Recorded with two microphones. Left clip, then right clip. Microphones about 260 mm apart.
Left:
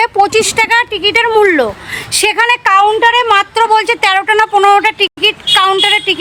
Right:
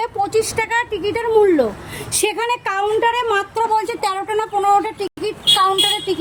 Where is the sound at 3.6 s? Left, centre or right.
Left.